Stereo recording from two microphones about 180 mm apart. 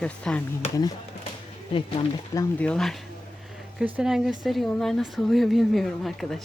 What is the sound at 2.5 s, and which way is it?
Speech, 5° left (ahead or behind).